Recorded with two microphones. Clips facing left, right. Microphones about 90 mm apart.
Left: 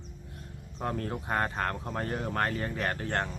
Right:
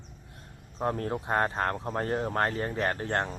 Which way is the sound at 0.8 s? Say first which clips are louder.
Right 4 dB; 30° right (ahead or behind).